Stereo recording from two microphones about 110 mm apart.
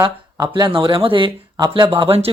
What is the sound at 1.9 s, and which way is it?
Speech, 60° right (ahead or behind).